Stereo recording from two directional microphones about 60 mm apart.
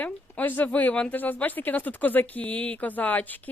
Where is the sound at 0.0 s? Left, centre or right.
Left.